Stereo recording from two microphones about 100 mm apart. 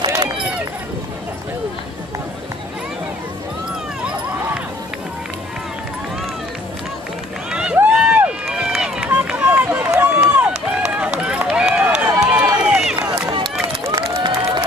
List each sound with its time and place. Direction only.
7.7 s run: 10° right (ahead or behind)
13.3 s run: 55° right (ahead or behind)